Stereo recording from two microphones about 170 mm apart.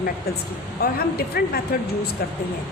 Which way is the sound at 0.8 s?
70° left (ahead or behind).